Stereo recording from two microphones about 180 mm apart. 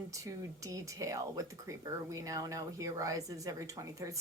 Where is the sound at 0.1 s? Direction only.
20° right (ahead or behind).